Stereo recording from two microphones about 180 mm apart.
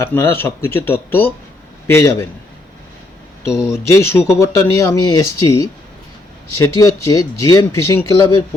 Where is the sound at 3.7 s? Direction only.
15° left (ahead or behind).